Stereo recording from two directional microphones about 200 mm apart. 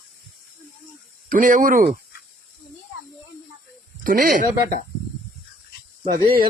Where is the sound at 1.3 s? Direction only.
40° right (ahead or behind).